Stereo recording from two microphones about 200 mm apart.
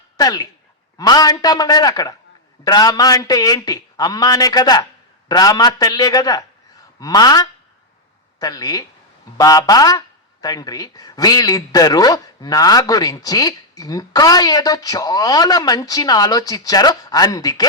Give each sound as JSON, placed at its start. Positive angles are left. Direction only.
{"t": 0.2, "sound": "speech", "side_deg": 20}